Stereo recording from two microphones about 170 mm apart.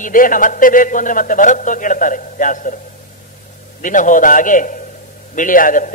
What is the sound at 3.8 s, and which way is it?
A man's voice, 50° left (ahead or behind).